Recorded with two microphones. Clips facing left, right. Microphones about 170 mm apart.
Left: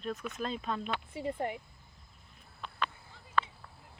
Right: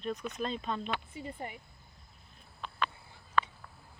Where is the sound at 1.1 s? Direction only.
70° left (ahead or behind).